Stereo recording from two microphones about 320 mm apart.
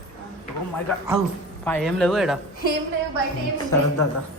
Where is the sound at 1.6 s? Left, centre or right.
Centre.